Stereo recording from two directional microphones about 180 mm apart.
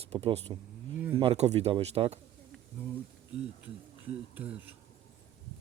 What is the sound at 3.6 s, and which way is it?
Speech, 5° right (ahead or behind).